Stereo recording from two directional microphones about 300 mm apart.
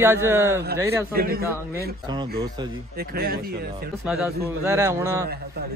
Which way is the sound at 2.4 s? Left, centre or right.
Centre.